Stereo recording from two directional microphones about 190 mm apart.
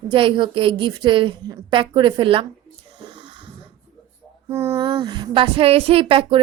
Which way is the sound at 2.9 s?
25° right (ahead or behind).